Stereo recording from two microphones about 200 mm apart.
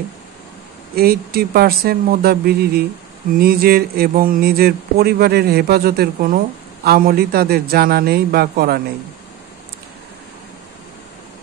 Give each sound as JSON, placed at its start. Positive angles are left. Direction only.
{"t": 0.9, "sound": "speech", "side_deg": -50}